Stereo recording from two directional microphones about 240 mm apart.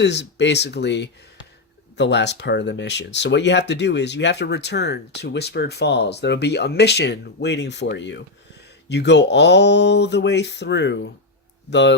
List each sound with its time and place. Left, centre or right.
0.0 s speech: left